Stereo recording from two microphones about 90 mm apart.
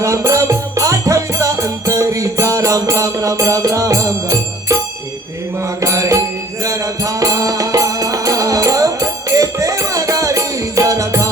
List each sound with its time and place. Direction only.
0.0 s music: 35° right (ahead or behind)
5.8 s mantra: 35° right (ahead or behind)
6.7 s music: 35° right (ahead or behind)